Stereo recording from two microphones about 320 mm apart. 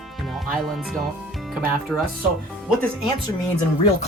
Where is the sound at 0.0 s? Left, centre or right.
Centre.